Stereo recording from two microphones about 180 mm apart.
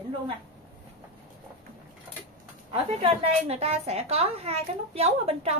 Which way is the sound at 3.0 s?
35° right (ahead or behind).